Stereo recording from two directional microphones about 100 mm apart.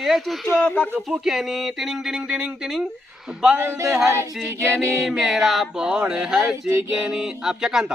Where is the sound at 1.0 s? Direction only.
5° right (ahead or behind).